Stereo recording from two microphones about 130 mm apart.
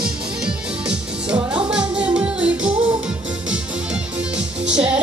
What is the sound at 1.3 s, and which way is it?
Music, 40° right (ahead or behind).